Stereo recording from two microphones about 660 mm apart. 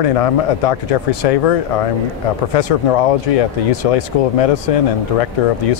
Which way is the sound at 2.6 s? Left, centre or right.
Left.